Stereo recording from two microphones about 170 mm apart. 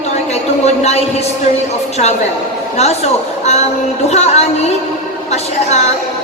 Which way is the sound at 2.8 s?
40° left (ahead or behind).